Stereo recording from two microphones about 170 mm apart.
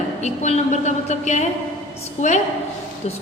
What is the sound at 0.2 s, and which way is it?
A woman's voice, 40° left (ahead or behind).